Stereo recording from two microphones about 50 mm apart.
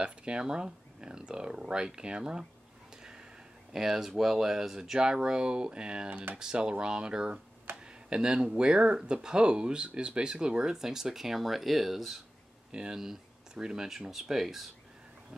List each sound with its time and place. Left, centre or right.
0.0 s speech: centre
3.7 s speech: centre